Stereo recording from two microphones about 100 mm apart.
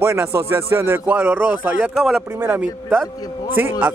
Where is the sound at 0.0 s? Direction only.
25° right (ahead or behind).